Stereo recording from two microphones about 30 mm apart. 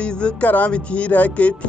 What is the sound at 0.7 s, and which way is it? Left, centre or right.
Speech, left.